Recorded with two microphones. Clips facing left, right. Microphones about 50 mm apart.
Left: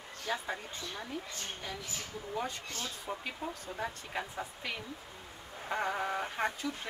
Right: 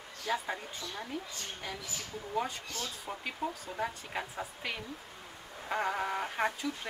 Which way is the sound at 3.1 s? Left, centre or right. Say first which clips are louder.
Right 3 dB; centre.